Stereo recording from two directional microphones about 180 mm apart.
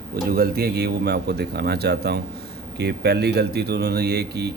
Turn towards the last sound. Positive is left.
turn(degrees=-65)  # may be behind; listen again after turning